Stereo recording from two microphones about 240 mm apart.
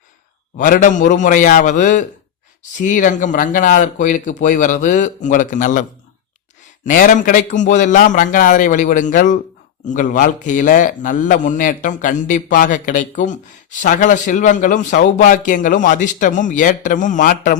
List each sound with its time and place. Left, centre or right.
0.5 s a man's voice: left
6.8 s a man's voice: left